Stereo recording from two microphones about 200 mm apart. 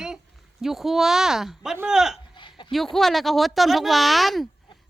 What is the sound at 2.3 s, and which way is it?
Chuckle, 25° left (ahead or behind).